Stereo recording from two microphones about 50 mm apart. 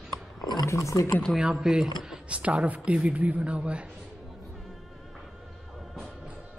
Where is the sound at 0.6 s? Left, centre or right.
Left.